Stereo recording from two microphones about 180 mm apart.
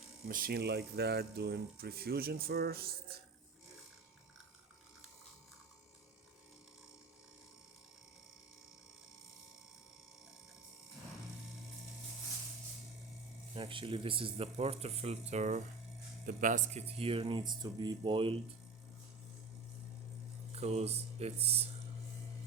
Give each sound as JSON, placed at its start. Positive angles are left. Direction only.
{"t": 0.3, "sound": "speech", "side_deg": -55}
{"t": 13.5, "sound": "speech", "side_deg": -30}
{"t": 20.5, "sound": "speech", "side_deg": -35}